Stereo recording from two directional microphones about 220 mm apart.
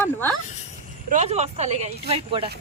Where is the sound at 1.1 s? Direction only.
30° right (ahead or behind).